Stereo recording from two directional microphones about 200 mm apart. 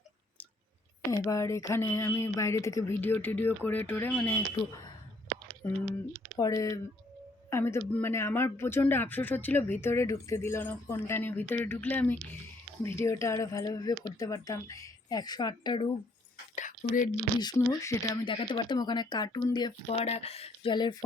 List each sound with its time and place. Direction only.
1.1 s speech: 15° left (ahead or behind)
6.3 s speech: 15° left (ahead or behind)
16.6 s a sound: 40° left (ahead or behind)
17.4 s speech: 20° left (ahead or behind)
20.1 s speech: 30° left (ahead or behind)